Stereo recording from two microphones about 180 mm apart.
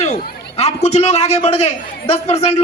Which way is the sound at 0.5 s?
35° left (ahead or behind).